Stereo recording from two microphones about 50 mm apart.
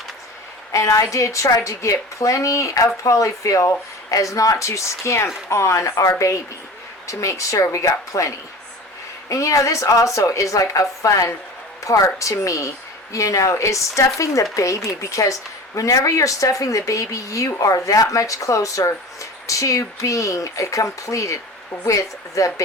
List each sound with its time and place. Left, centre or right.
0.7 s speech: left
9.3 s speech: left